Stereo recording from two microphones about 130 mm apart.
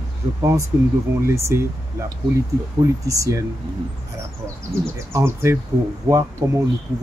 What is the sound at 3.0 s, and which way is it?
Speech, 25° right (ahead or behind).